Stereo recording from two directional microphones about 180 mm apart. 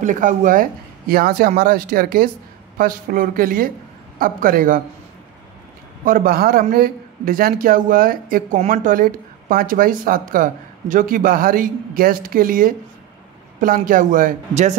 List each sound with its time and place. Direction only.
0.0 s speech: 45° right (ahead or behind)
6.0 s speech: 55° right (ahead or behind)